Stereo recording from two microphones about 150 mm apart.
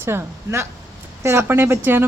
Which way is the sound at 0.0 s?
15° right (ahead or behind).